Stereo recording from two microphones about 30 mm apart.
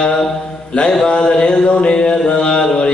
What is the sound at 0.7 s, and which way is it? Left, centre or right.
Mantra, left.